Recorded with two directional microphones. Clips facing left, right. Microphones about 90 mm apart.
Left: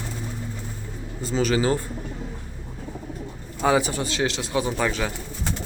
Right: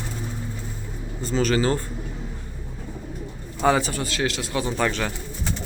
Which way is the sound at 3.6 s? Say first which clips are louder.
Even; 10° left (ahead or behind).